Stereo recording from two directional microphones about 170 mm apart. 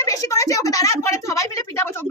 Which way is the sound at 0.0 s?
20° left (ahead or behind).